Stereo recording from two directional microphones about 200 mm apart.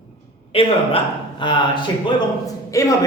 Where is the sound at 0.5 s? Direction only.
25° left (ahead or behind).